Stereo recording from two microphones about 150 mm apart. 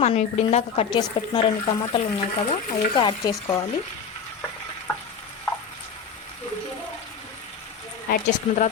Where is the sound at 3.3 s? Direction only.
20° left (ahead or behind).